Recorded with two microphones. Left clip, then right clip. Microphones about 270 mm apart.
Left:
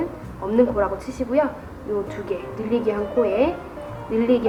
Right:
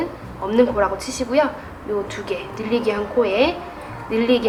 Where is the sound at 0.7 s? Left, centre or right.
Centre.